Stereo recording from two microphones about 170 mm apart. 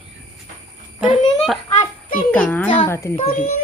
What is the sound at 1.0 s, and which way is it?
A woman's voice, centre (ahead or behind).